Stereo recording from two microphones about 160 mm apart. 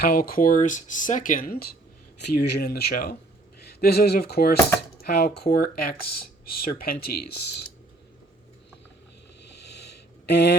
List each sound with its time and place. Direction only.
0.0 s speech: 65° left (ahead or behind)
2.2 s speech: 90° left; by 7.1 s 65° left (ahead or behind)
9.8 s a sound: 90° left